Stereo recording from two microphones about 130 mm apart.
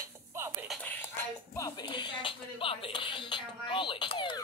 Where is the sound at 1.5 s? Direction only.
30° left (ahead or behind).